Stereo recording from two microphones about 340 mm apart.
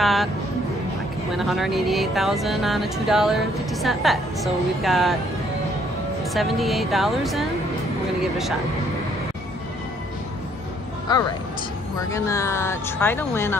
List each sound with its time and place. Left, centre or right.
0.0 s music: centre
1.3 s speech: centre
6.3 s speech: centre
11.1 s speech: centre